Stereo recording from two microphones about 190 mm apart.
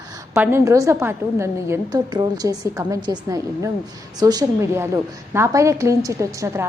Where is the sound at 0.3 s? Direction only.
15° right (ahead or behind).